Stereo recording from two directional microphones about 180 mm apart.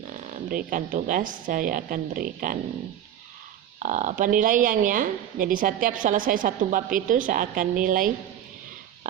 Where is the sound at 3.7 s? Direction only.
45° right (ahead or behind).